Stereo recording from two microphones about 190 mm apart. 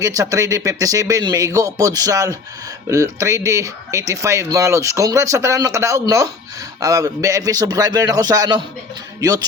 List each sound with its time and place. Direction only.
0.0 s a man's voice: 15° right (ahead or behind)